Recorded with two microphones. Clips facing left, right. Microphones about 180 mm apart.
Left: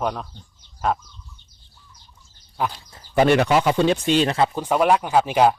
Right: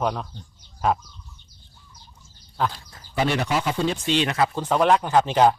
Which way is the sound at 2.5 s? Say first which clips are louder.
Even; 10° left (ahead or behind).